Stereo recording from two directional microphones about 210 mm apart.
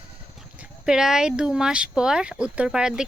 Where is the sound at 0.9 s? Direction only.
5° right (ahead or behind).